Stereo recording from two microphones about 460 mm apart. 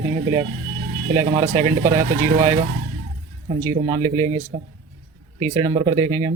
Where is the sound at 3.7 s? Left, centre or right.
Centre.